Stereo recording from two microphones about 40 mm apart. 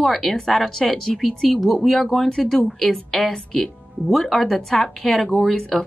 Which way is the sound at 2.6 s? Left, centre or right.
Centre.